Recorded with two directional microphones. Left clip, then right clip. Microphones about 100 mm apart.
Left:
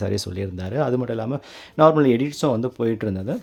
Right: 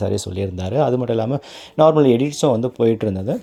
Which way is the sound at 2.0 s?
15° right (ahead or behind).